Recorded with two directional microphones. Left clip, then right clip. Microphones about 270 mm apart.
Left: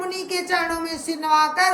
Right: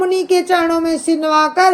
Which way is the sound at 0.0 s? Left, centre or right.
Centre.